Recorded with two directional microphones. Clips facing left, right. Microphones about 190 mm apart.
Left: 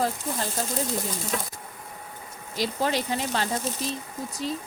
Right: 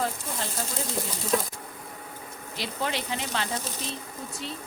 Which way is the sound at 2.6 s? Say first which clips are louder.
Left 5 dB; 40° left (ahead or behind).